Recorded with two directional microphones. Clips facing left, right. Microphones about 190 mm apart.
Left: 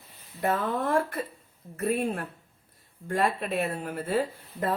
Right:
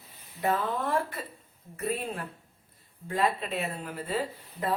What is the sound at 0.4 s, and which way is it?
Speech, 50° left (ahead or behind).